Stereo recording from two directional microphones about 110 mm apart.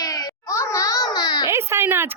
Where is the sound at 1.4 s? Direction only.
25° right (ahead or behind).